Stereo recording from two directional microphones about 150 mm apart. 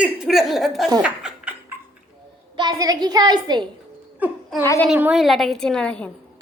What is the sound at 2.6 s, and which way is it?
A woman's voice, 25° right (ahead or behind).